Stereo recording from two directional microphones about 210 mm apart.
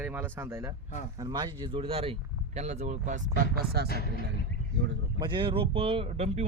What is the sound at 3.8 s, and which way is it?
Speech, 45° left (ahead or behind).